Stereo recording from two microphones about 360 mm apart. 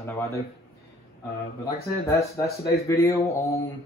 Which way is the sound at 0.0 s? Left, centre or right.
Centre.